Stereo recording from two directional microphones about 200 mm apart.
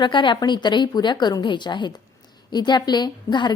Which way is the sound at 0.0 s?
25° left (ahead or behind).